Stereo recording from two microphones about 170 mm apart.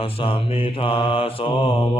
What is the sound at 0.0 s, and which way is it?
Mantra, 30° left (ahead or behind).